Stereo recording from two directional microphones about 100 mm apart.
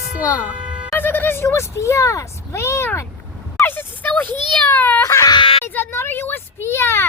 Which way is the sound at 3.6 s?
20° left (ahead or behind).